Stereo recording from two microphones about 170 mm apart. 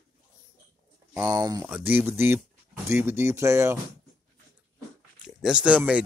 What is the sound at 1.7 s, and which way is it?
Speech, 10° right (ahead or behind).